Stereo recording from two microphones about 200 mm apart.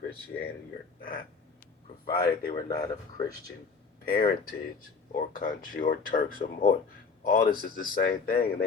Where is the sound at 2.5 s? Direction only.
25° left (ahead or behind).